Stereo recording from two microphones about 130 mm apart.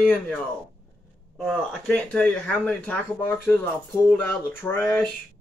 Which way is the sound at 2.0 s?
5° left (ahead or behind).